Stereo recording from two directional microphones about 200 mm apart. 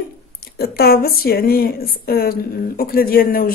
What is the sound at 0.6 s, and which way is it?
A woman's voice, 50° left (ahead or behind).